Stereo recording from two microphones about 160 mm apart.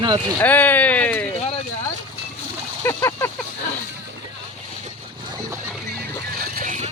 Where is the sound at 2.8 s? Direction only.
15° left (ahead or behind).